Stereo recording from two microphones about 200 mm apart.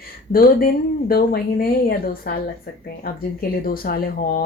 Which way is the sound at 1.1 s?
50° left (ahead or behind).